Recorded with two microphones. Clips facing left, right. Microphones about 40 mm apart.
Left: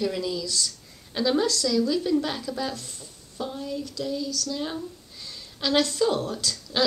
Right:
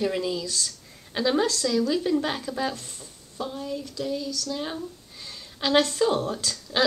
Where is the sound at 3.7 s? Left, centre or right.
Centre.